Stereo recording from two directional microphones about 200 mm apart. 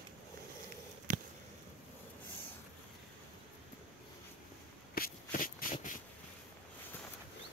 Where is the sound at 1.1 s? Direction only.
40° right (ahead or behind).